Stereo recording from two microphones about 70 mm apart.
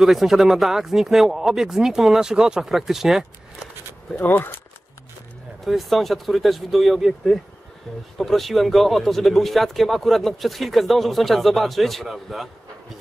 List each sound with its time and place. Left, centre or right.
0.0 s speech: centre
4.2 s speech: left
5.7 s speech: centre